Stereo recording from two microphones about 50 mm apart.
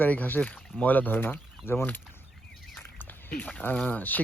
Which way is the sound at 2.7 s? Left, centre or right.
Left.